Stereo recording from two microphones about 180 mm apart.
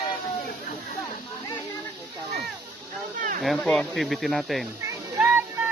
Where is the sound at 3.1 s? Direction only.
50° right (ahead or behind).